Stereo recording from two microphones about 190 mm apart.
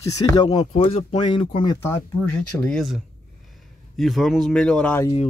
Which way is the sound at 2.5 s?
5° left (ahead or behind).